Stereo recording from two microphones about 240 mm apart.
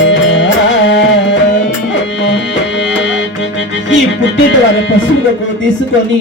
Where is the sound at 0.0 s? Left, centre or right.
Left.